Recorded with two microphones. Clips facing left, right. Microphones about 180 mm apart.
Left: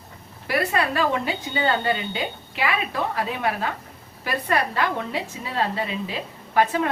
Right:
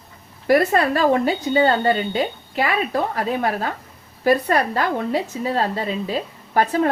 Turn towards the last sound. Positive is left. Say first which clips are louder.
# right 3 dB
turn(degrees=-40)  # may be behind; listen again after turning